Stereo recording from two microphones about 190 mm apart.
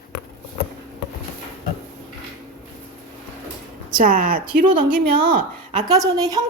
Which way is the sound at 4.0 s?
45° right (ahead or behind).